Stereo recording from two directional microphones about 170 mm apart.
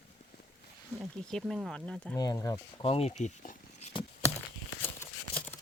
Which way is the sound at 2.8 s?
35° left (ahead or behind).